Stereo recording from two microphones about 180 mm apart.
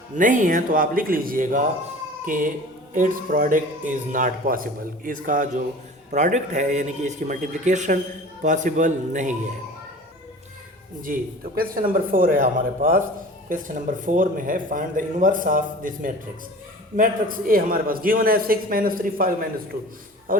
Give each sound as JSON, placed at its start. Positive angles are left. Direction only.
{"t": 0.2, "sound": "a man's voice", "side_deg": -45}
{"t": 11.0, "sound": "speech", "side_deg": -55}